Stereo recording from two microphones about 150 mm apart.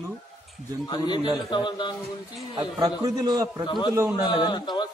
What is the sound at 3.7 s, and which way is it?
A man's voice, 30° left (ahead or behind).